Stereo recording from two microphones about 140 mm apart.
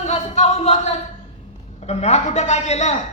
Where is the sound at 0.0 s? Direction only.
50° left (ahead or behind).